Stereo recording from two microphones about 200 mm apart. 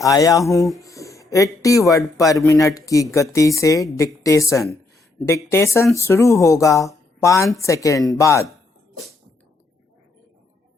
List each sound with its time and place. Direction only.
0.0 s speech: 15° left (ahead or behind)